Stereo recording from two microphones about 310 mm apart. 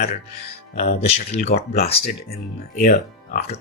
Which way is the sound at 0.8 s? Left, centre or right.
Left.